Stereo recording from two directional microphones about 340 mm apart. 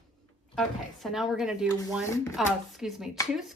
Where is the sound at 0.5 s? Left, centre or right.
Centre.